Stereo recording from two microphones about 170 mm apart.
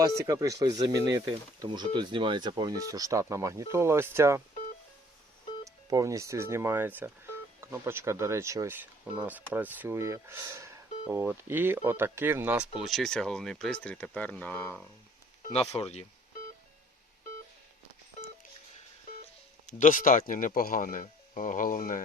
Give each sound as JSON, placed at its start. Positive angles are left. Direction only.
{"t": 0.0, "sound": "speech", "side_deg": -20}
{"t": 5.6, "sound": "speech", "side_deg": -20}
{"t": 15.4, "sound": "speech", "side_deg": 40}
{"t": 18.2, "sound": "telephone dialing", "side_deg": 40}
{"t": 19.6, "sound": "speech", "side_deg": 50}